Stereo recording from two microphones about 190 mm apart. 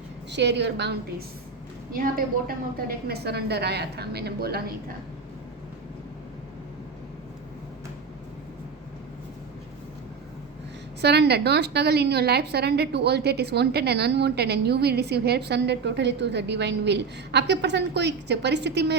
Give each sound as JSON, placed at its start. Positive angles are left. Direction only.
{"t": 0.3, "sound": "a woman's voice", "side_deg": -65}
{"t": 1.9, "sound": "a woman's voice", "side_deg": -50}
{"t": 11.0, "sound": "a woman's voice", "side_deg": -60}